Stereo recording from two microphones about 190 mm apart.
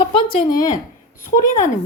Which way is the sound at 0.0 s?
25° left (ahead or behind).